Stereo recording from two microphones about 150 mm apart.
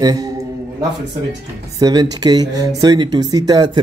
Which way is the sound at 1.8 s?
25° right (ahead or behind).